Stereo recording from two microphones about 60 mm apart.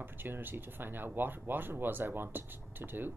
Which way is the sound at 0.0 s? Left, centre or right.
Right.